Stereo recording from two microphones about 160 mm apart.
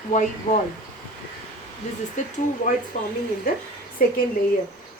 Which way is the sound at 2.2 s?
50° left (ahead or behind).